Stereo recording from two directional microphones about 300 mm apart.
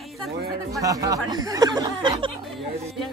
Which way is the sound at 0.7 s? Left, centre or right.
Centre.